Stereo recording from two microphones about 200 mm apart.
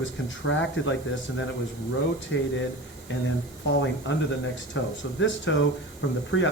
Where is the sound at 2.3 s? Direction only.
70° left (ahead or behind).